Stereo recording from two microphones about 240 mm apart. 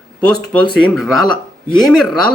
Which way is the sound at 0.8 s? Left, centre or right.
Centre.